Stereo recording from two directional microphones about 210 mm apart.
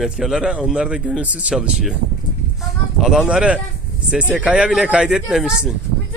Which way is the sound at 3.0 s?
5° right (ahead or behind).